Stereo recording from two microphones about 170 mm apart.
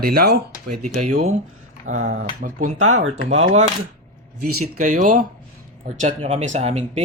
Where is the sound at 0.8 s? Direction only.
50° right (ahead or behind).